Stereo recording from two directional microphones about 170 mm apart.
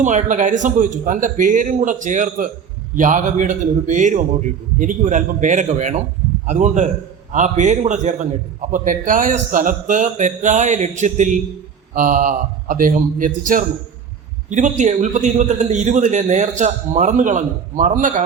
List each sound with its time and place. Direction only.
0.0 s a man's voice: 50° right (ahead or behind)